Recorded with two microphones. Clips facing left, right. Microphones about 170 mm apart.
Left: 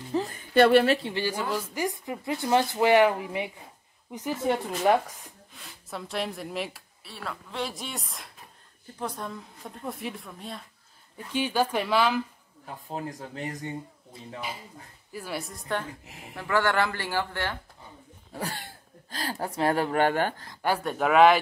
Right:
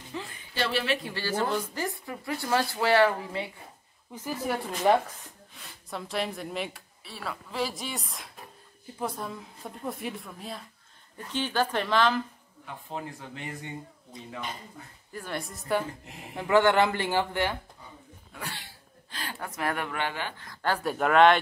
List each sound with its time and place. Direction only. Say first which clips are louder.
0.1 s speech: left 13 dB; 40° left (ahead or behind)
1.0 s a woman's voice: even; 15° left (ahead or behind)
4.9 s a woman's voice: even; centre (ahead or behind)
11.3 s a woman's voice: left 2 dB; 10° left (ahead or behind)
12.6 s speech: left 2 dB; 40° left (ahead or behind)
14.4 s a woman's voice: left 3 dB; 5° left (ahead or behind)
16.3 s speech: right 4 dB; 20° right (ahead or behind)
18.3 s speech: left 6 dB; 40° left (ahead or behind)
20.0 s speech: left 9 dB; 45° left (ahead or behind)
20.8 s a woman's voice: left 1 dB; centre (ahead or behind)